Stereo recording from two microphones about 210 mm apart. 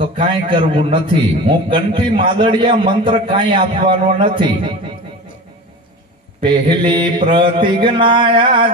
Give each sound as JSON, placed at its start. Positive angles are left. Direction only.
{"t": 0.2, "sound": "a man's voice", "side_deg": -20}
{"t": 6.4, "sound": "a man's voice", "side_deg": -20}